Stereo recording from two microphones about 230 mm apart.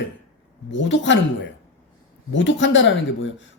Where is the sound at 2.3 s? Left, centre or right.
Left.